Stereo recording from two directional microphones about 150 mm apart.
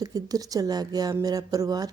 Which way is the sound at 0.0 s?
25° right (ahead or behind).